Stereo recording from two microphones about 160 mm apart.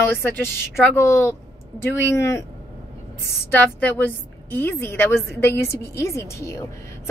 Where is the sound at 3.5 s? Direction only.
10° left (ahead or behind).